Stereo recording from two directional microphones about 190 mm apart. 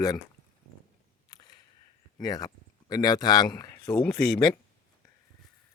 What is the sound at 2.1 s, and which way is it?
Speech, 20° left (ahead or behind).